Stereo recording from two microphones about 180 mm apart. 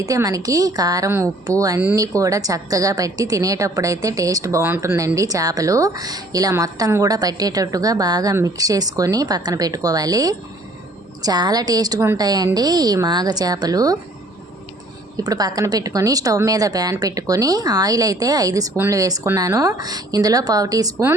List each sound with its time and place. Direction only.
0.0 s a woman's voice: 20° right (ahead or behind)
15.1 s a woman's voice: 20° right (ahead or behind)